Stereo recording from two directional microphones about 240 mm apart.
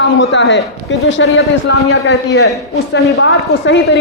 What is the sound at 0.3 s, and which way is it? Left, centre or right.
A man's voice, left.